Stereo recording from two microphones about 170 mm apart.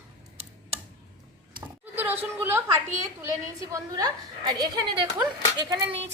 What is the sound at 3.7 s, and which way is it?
A woman's voice, 25° right (ahead or behind).